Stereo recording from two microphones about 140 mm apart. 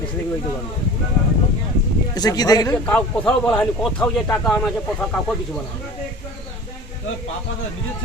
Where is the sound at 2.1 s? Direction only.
30° left (ahead or behind).